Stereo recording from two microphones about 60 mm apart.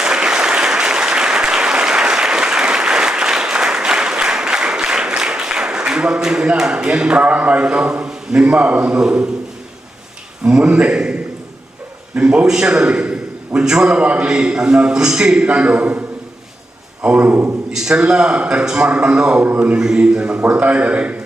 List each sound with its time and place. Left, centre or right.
0.0 s applause: centre
10.4 s a man's voice: centre; by 17.5 s right
17.7 s a man's voice: centre; by 19.7 s right
19.7 s a man's voice: centre